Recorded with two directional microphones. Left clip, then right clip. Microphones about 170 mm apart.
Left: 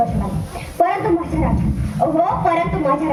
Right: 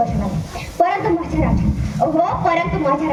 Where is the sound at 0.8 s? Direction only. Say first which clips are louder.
Even; 25° right (ahead or behind).